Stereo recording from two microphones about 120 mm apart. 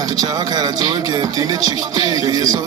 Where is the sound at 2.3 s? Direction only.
30° right (ahead or behind).